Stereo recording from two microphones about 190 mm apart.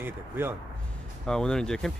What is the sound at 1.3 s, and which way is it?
Speech, 5° left (ahead or behind).